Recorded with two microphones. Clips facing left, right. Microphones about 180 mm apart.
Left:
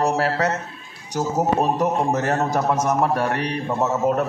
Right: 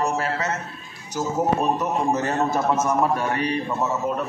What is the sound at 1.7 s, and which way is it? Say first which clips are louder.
A man's voice: left 2 dB; 75° left (ahead or behind).